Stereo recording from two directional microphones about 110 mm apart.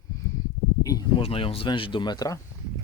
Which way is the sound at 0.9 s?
35° left (ahead or behind).